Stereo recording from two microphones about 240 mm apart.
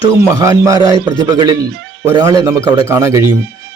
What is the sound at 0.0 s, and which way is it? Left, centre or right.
Speech, centre.